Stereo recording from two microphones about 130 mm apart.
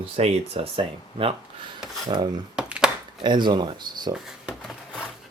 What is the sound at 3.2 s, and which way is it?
Speech, 35° right (ahead or behind).